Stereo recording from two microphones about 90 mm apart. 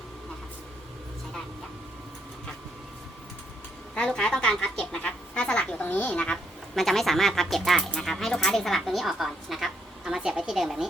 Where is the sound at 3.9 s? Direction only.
10° left (ahead or behind).